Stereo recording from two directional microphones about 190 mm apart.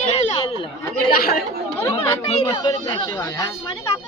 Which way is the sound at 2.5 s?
25° left (ahead or behind).